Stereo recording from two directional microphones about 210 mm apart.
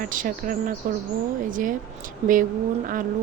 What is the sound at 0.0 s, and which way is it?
Speech, 40° right (ahead or behind).